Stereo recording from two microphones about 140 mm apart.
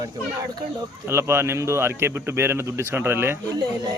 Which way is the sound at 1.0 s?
15° right (ahead or behind).